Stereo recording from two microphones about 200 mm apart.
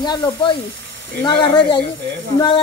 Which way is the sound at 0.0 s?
20° left (ahead or behind).